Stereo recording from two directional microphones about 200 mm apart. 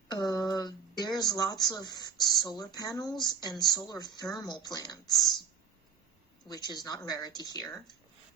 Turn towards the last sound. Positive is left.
turn(degrees=20)  # may be behind; listen again after turning